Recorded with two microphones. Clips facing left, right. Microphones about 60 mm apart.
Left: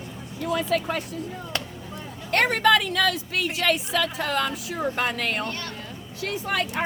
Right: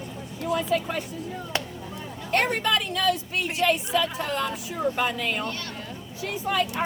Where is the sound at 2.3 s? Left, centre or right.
Left.